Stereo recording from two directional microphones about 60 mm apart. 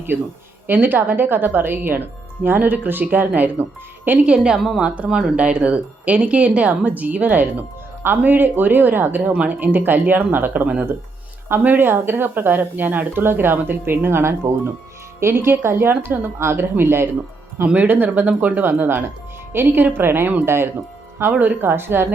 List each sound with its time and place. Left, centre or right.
0.7 s speech: right
4.5 s a woman's voice: centre
4.8 s speech: centre; by 17.1 s right
17.8 s speech: right